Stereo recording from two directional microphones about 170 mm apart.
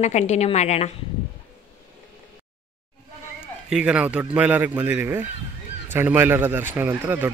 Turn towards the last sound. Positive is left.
turn(degrees=-15)  # may be behind; listen again after turning